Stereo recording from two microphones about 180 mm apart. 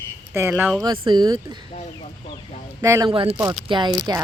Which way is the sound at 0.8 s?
25° right (ahead or behind).